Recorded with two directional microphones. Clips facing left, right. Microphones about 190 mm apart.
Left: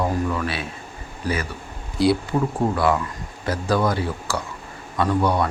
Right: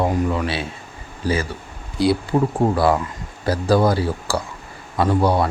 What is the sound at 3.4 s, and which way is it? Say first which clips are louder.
Speech: right 4 dB; 35° right (ahead or behind).